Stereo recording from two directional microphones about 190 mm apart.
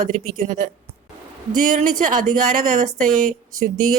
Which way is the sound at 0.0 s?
45° right (ahead or behind).